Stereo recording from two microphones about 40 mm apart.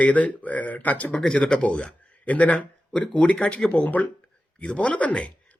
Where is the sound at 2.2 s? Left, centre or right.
Left.